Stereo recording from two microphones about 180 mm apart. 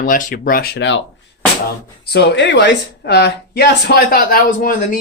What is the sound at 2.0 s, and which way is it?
Speech, 75° left (ahead or behind).